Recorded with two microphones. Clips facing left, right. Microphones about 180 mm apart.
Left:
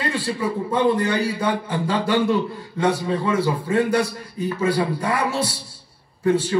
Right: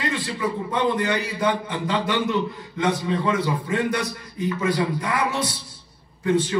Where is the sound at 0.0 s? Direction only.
30° left (ahead or behind).